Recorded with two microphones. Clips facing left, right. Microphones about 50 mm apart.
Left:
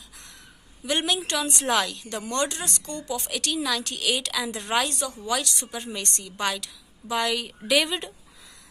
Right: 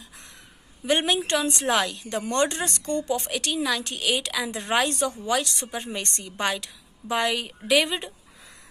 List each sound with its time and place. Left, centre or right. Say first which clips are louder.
0.8 s a woman's voice: right 3 dB; right
4.6 s a woman's voice: right 4 dB; right
5.7 s a woman's voice: right 1 dB; right